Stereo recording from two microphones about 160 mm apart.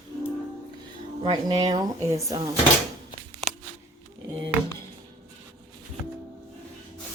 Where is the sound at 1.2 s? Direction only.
25° right (ahead or behind).